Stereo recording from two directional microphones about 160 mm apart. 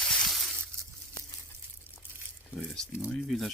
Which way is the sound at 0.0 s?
5° left (ahead or behind).